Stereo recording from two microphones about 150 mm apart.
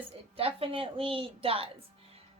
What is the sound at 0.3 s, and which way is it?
A woman's voice, 40° right (ahead or behind).